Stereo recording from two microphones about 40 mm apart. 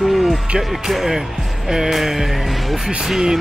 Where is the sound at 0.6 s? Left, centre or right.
Centre.